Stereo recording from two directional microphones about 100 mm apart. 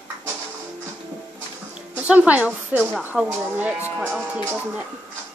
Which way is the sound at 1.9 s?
15° right (ahead or behind).